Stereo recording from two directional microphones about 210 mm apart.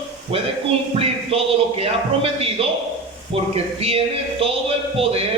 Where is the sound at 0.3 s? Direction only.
30° right (ahead or behind).